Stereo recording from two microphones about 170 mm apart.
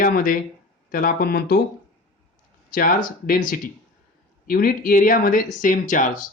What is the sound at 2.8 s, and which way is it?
Speech, 55° left (ahead or behind).